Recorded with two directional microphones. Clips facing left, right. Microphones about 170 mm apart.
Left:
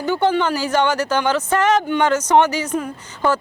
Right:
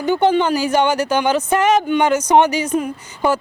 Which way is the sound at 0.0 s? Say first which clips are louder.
Right 3 dB; 20° right (ahead or behind).